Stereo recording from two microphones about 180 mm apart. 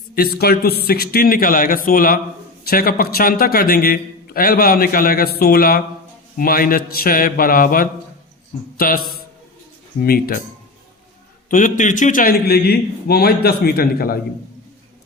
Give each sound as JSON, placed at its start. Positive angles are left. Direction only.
{"t": 0.1, "sound": "a man's voice", "side_deg": 55}
{"t": 10.0, "sound": "a man's voice", "side_deg": 55}
{"t": 11.4, "sound": "a man's voice", "side_deg": 45}